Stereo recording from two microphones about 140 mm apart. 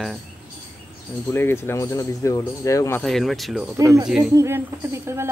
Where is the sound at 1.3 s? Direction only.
15° left (ahead or behind).